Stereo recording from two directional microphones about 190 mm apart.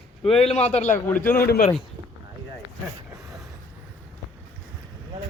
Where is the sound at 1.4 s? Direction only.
55° left (ahead or behind).